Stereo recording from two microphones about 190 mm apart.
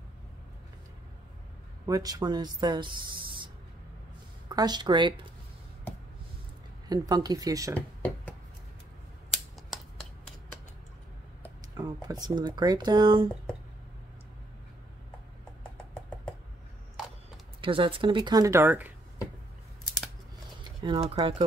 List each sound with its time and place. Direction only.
1.9 s speech: 20° right (ahead or behind)
4.5 s speech: 20° right (ahead or behind)
6.9 s speech: 20° right (ahead or behind)
7.7 s a sound: 10° left (ahead or behind)
9.3 s scissors: centre (ahead or behind)
11.7 s speech: 20° right (ahead or behind)
15.8 s knock: 5° left (ahead or behind)
17.6 s speech: 25° right (ahead or behind); by 18.9 s 10° right (ahead or behind)
20.8 s speech: 25° right (ahead or behind)